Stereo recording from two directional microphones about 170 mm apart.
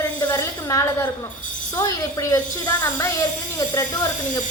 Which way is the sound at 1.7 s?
20° left (ahead or behind).